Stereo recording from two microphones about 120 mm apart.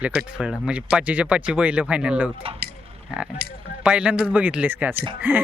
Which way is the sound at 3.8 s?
10° right (ahead or behind).